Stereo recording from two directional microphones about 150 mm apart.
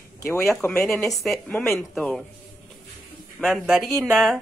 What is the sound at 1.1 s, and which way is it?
A woman's voice, centre (ahead or behind).